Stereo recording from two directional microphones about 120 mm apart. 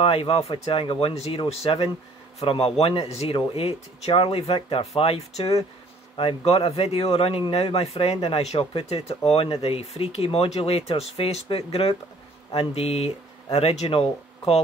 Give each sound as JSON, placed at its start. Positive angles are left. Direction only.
{"t": 0.0, "sound": "speech", "side_deg": 50}